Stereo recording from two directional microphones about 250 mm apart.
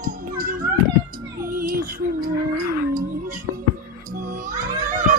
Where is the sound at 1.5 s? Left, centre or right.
Right.